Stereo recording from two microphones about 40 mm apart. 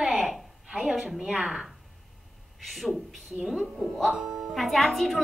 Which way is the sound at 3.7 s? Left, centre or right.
Centre.